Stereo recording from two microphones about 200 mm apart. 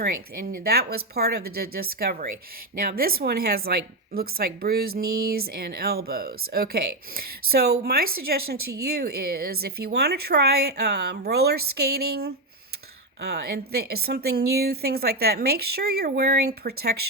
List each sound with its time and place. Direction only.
0.0 s a woman's voice: 50° right (ahead or behind)